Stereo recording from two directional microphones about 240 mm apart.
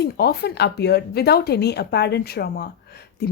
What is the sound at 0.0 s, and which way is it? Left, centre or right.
Speech, left.